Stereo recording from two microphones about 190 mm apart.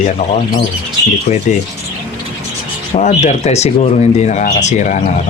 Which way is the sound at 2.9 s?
35° left (ahead or behind).